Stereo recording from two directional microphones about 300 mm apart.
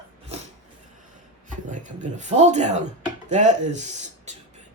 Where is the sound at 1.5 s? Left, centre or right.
Right.